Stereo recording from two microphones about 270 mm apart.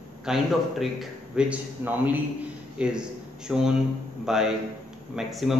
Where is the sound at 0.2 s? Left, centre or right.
Centre.